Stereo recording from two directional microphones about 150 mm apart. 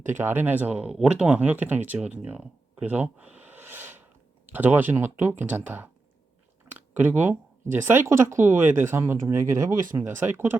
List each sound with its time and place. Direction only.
0.1 s speech: 15° right (ahead or behind)